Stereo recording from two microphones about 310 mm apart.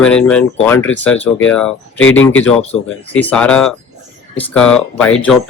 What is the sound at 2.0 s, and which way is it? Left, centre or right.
Speech, left.